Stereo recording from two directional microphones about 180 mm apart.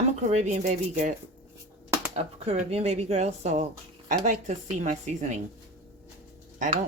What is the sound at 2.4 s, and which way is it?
A woman's voice, 35° right (ahead or behind).